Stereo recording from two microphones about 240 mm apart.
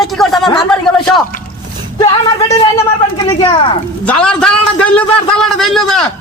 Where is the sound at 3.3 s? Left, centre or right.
Centre.